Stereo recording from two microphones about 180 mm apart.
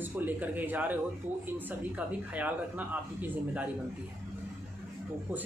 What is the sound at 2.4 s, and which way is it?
Speech, 10° right (ahead or behind).